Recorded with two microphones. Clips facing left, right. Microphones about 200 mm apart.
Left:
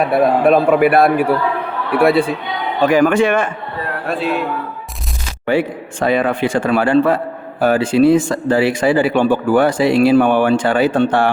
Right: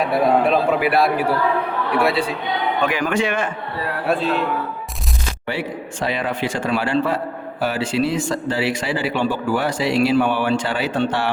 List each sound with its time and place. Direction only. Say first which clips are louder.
0.1 s speech: left 4 dB; 55° left (ahead or behind)
5.5 s a man's voice: left 9 dB; 50° left (ahead or behind)